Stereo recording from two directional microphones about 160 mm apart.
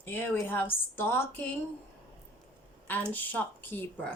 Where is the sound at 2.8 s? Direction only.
10° left (ahead or behind).